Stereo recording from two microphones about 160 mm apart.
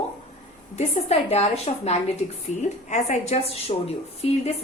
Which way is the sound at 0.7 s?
45° left (ahead or behind).